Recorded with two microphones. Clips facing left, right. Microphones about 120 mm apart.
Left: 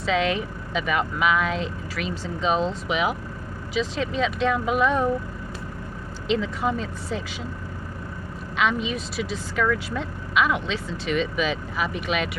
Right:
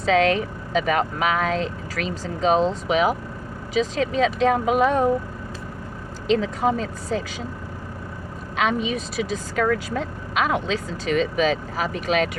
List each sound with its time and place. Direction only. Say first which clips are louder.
0.0 s speech: right 5 dB; 40° right (ahead or behind)
6.2 s speech: right 4 dB; 40° right (ahead or behind)
8.5 s speech: right 2 dB; 45° right (ahead or behind)